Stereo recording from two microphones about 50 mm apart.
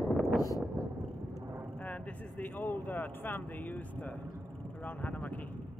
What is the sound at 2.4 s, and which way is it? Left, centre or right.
Speech, left.